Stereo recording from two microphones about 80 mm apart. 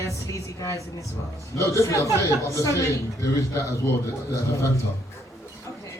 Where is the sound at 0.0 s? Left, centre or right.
Left.